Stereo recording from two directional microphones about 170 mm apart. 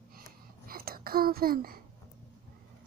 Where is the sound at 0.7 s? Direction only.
60° right (ahead or behind).